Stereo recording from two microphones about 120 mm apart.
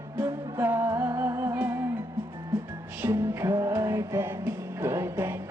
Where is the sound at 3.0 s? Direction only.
20° right (ahead or behind).